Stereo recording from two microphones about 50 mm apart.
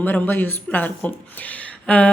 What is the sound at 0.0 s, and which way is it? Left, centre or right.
Speech, left.